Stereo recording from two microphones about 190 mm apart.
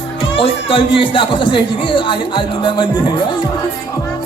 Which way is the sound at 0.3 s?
30° left (ahead or behind).